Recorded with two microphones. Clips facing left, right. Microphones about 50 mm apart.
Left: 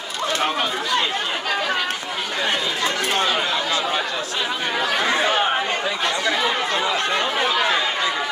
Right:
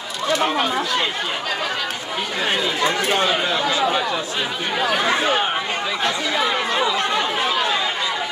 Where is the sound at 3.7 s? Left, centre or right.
Centre.